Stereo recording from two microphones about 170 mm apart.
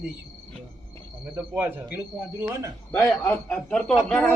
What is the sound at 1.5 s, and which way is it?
Speech, 10° right (ahead or behind).